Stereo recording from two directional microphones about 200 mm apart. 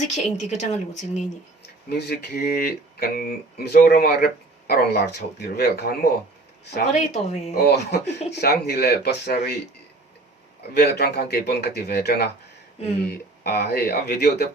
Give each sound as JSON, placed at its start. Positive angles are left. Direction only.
{"t": 0.0, "sound": "speech", "side_deg": 35}
{"t": 1.9, "sound": "speech", "side_deg": 55}
{"t": 7.1, "sound": "speech", "side_deg": 30}
{"t": 7.5, "sound": "a man's voice", "side_deg": 55}
{"t": 10.8, "sound": "a man's voice", "side_deg": 55}
{"t": 13.4, "sound": "a man's voice", "side_deg": 55}